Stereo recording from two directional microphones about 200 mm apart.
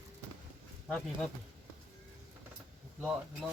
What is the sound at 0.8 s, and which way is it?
Speech, centre (ahead or behind).